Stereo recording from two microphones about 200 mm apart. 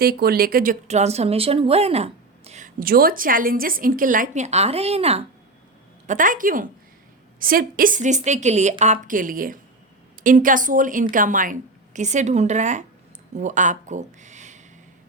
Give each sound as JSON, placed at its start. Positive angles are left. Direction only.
{"t": 0.0, "sound": "speech", "side_deg": -50}
{"t": 6.1, "sound": "speech", "side_deg": -40}